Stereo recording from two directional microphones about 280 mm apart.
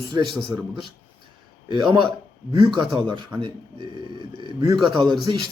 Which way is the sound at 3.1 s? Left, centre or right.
Centre.